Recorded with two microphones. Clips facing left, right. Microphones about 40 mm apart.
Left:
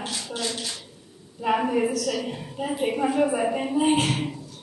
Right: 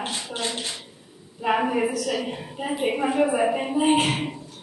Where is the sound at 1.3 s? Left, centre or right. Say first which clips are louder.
Even; centre.